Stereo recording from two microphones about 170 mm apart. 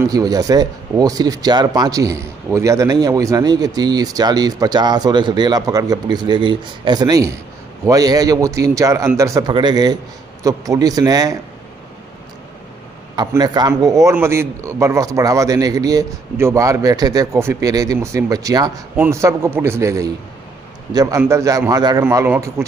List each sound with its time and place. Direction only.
0.1 s speech: 20° right (ahead or behind)
13.1 s a man's voice: 25° right (ahead or behind)
22.0 s a man's voice: 10° right (ahead or behind)